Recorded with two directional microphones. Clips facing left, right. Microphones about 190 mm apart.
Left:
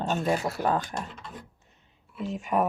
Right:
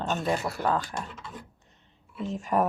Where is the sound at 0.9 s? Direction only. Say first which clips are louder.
Left 1 dB; centre (ahead or behind).